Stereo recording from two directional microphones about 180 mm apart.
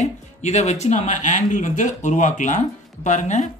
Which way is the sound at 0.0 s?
40° left (ahead or behind).